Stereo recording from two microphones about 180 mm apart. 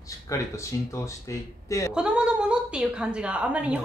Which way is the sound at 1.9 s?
5° right (ahead or behind).